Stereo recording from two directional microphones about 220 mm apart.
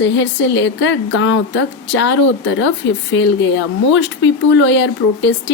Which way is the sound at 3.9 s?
60° left (ahead or behind).